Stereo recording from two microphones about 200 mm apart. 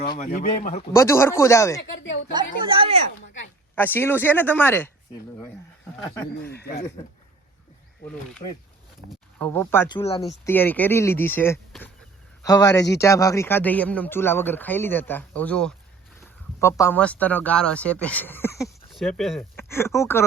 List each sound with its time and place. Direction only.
0.2 s a man's voice: 40° left (ahead or behind)
0.9 s speech: 15° left (ahead or behind)
2.3 s speech: 25° right (ahead or behind)
3.8 s speech: 10° left (ahead or behind)
6.4 s speech: 55° left (ahead or behind)
8.4 s a man's voice: 30° left (ahead or behind)
9.0 s speech: 10° left (ahead or behind)
18.9 s speech: centre (ahead or behind)
19.5 s speech: 10° left (ahead or behind)